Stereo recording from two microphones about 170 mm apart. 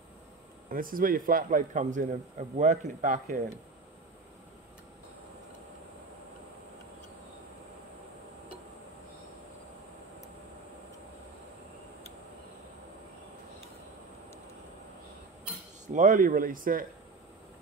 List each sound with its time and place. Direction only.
0.7 s a man's voice: 55° right (ahead or behind)
15.9 s a man's voice: 50° right (ahead or behind)